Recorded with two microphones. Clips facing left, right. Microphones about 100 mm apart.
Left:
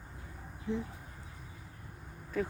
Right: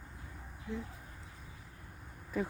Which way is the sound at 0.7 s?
25° left (ahead or behind).